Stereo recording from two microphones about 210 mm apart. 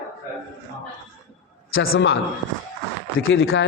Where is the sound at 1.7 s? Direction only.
65° left (ahead or behind).